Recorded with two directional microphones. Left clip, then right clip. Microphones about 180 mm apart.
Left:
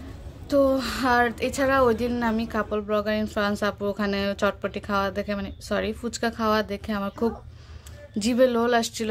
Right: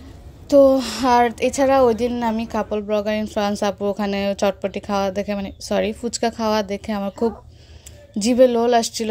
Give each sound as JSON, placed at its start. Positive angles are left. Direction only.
{"t": 0.5, "sound": "a woman's voice", "side_deg": -25}